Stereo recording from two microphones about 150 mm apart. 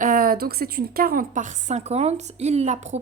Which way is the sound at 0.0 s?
70° right (ahead or behind).